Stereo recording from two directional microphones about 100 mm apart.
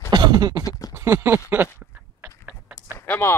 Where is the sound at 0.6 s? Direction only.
40° left (ahead or behind).